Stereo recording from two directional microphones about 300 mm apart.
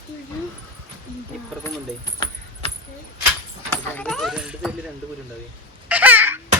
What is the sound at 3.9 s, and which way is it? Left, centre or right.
Speech, centre.